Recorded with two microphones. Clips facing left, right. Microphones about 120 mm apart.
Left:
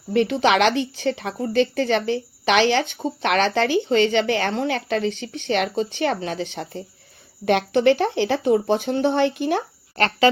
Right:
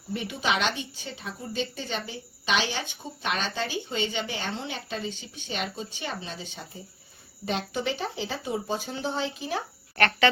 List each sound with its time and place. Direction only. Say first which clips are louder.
0.1 s a woman's voice: left 10 dB; 80° left